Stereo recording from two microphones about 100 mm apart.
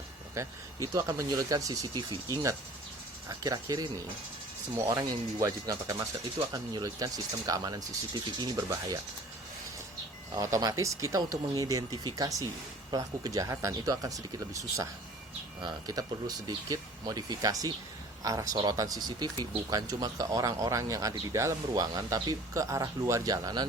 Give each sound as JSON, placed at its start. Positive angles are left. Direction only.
{"t": 0.9, "sound": "speech", "side_deg": -35}
{"t": 10.3, "sound": "speech", "side_deg": -35}